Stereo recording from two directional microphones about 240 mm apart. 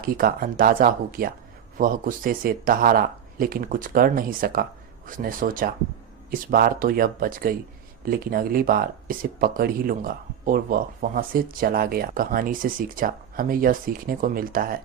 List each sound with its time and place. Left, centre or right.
0.0 s speech: right